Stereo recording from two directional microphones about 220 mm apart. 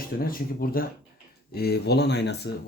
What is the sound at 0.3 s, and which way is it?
Speech, 40° left (ahead or behind).